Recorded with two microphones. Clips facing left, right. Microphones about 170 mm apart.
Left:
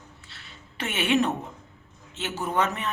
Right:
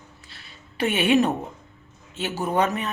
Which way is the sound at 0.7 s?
10° right (ahead or behind).